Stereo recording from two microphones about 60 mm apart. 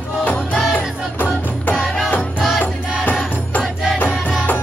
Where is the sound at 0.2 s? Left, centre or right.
Left.